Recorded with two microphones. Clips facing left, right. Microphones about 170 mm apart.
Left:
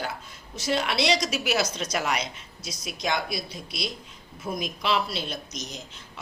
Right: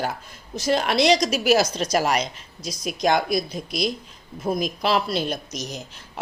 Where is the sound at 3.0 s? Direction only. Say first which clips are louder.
Right 8 dB; 50° right (ahead or behind).